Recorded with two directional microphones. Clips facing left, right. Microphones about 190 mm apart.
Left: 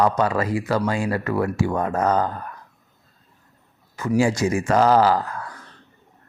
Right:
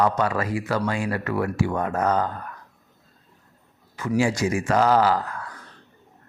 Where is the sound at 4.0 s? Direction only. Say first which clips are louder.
Left 2 dB; 40° left (ahead or behind).